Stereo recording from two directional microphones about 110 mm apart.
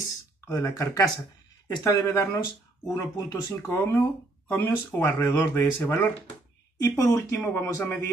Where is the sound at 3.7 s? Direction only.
20° left (ahead or behind).